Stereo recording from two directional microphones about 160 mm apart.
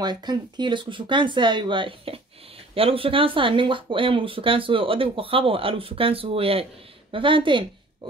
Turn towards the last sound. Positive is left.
turn(degrees=-30)  # may be behind; listen again after turning